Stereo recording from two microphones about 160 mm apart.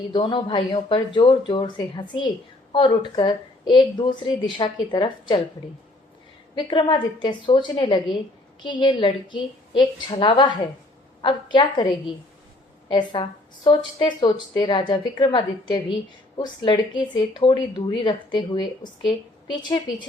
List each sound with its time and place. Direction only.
0.1 s a woman's voice: 30° left (ahead or behind)
6.6 s a woman's voice: 30° left (ahead or behind)